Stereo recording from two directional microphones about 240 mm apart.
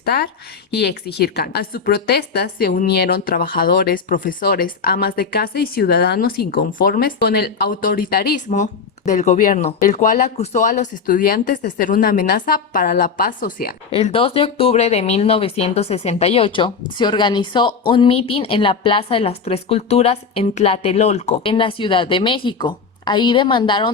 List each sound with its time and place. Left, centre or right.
0.0 s a woman's voice: left
13.9 s speech: left